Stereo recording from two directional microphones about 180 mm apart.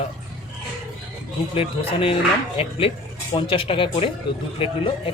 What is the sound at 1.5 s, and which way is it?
Speech, 30° left (ahead or behind).